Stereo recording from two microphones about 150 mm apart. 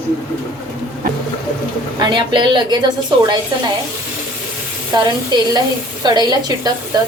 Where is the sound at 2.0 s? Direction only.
30° right (ahead or behind).